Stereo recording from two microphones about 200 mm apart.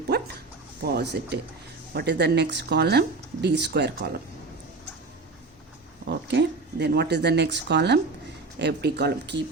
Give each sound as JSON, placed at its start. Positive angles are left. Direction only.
{"t": 0.1, "sound": "dog", "side_deg": -55}
{"t": 0.8, "sound": "speech", "side_deg": -55}
{"t": 6.1, "sound": "speech", "side_deg": -55}